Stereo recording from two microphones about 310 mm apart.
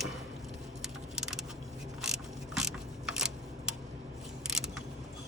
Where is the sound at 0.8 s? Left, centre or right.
Centre.